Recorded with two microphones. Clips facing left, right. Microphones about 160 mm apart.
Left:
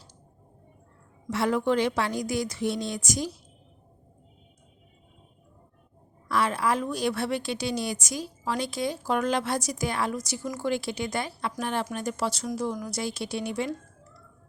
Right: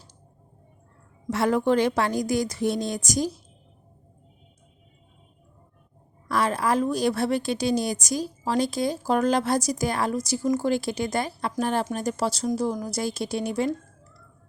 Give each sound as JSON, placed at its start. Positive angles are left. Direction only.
{"t": 1.3, "sound": "a woman's voice", "side_deg": -45}
{"t": 6.2, "sound": "a woman's voice", "side_deg": -40}